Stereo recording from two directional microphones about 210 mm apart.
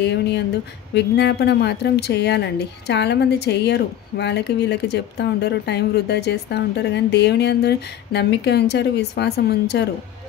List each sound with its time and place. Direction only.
0.0 s a woman's voice: 55° left (ahead or behind)